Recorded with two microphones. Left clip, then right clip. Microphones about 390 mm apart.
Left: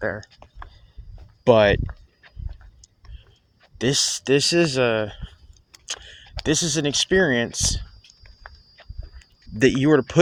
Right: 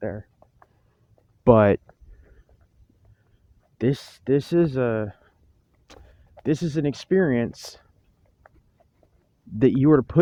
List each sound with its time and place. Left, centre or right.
0.0 s speech: right
1.5 s speech: right
3.8 s speech: right
5.9 s a sound: right
6.4 s speech: right
9.6 s speech: right